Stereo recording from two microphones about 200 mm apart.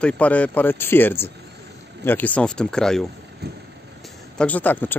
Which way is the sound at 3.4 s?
55° right (ahead or behind).